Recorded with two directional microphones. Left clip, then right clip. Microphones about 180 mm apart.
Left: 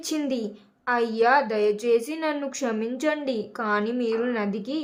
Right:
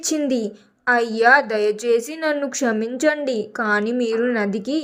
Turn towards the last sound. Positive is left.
turn(degrees=-25)  # may be behind; listen again after turning